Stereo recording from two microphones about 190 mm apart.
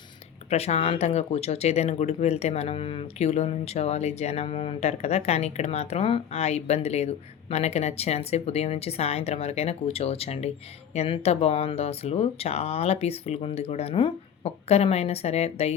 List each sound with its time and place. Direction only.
0.5 s speech: 35° left (ahead or behind)